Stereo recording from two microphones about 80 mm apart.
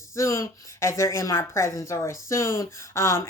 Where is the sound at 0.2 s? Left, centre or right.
Left.